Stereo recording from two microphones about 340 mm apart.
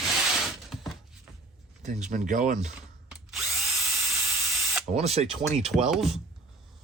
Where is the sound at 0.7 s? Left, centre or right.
Centre.